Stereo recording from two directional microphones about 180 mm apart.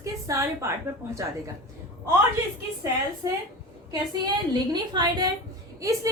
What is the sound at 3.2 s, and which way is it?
Speech, 20° right (ahead or behind).